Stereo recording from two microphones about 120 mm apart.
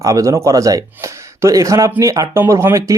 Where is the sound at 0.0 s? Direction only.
25° right (ahead or behind).